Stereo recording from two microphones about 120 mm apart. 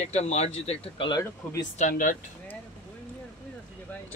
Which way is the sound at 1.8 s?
90° left.